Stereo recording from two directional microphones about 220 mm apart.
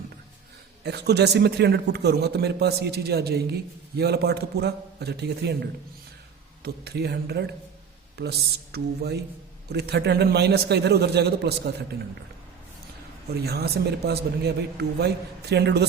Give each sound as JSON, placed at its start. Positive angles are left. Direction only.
{"t": 0.9, "sound": "a man's voice", "side_deg": -50}
{"t": 6.8, "sound": "a man's voice", "side_deg": -45}
{"t": 13.4, "sound": "a man's voice", "side_deg": -45}